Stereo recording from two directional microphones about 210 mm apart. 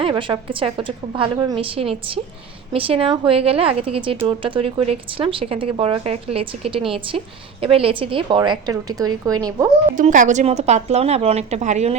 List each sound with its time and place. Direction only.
0.0 s a woman's voice: 25° right (ahead or behind)
10.0 s a woman's voice: 35° right (ahead or behind)